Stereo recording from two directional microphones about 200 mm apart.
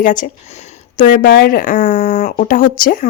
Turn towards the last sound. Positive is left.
turn(degrees=40)  # may be behind; listen again after turning